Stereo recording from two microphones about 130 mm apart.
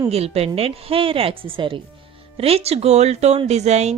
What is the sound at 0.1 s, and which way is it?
Speech, 50° right (ahead or behind).